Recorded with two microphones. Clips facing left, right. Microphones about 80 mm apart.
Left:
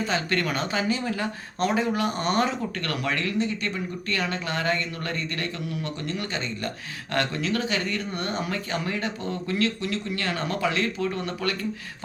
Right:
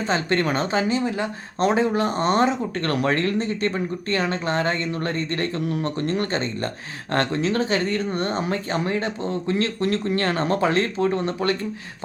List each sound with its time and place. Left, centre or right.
0.0 s speech: right